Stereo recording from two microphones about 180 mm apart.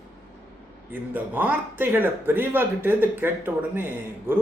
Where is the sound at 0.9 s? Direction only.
10° right (ahead or behind).